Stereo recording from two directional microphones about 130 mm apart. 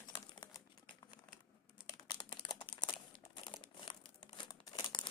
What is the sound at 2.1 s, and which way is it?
Crumpling, 35° left (ahead or behind).